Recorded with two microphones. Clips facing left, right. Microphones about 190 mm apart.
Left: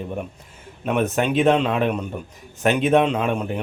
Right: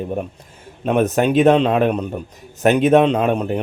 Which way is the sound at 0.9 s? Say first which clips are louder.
Right 5 dB; 40° right (ahead or behind).